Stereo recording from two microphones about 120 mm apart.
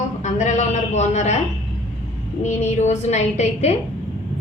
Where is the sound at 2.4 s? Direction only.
70° left (ahead or behind).